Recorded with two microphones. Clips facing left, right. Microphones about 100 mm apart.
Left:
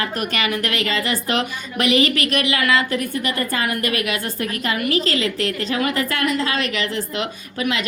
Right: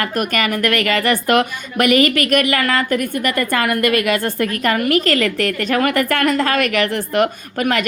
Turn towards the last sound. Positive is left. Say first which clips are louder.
# right 5 dB
turn(degrees=-55)  # may be behind; listen again after turning